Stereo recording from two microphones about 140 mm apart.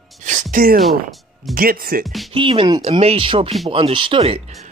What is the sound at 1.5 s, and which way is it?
Speech, 90° right.